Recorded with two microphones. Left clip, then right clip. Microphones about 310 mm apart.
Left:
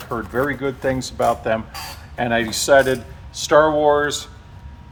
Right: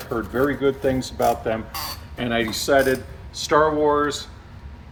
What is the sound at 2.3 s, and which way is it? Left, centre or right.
Speech, centre.